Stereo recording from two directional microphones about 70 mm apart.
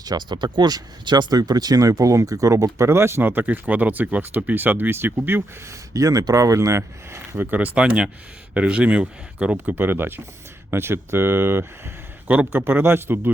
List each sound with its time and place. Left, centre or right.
0.0 s speech: right
5.9 s speech: right
7.3 s speech: right
9.7 s speech: right